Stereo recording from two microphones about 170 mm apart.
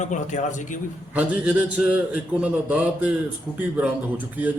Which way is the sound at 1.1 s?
10° right (ahead or behind).